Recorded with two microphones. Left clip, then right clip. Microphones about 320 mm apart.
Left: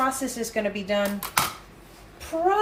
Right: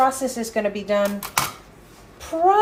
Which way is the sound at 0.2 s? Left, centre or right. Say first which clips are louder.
Right 4 dB; centre.